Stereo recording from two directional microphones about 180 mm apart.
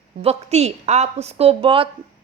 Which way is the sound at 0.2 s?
35° right (ahead or behind).